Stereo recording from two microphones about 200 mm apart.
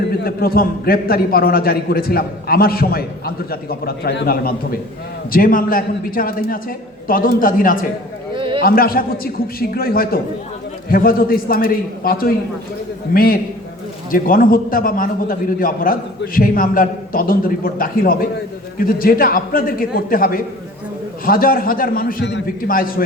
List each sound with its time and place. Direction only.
0.3 s a man's voice: 50° left (ahead or behind)
8.4 s a sound: 25° right (ahead or behind)
8.6 s a man's voice: 50° left (ahead or behind)